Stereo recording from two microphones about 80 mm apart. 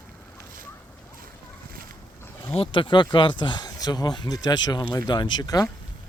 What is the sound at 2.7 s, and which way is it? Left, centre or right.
Speech, left.